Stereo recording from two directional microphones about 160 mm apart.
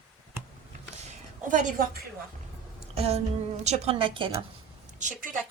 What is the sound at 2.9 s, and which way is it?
A woman's voice, 40° right (ahead or behind).